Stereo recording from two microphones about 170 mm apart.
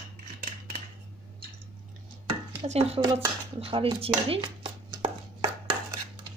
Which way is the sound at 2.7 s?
35° right (ahead or behind).